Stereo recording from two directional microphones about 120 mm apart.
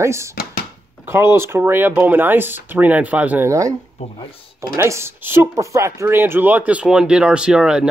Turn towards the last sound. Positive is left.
turn(degrees=-5)  # may be behind; listen again after turning